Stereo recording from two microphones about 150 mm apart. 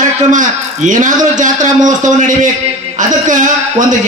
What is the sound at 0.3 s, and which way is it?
A man's voice, 55° right (ahead or behind).